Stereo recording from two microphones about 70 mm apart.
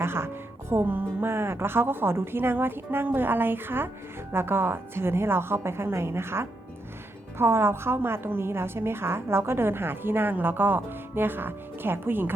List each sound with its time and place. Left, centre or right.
0.0 s a woman's voice: right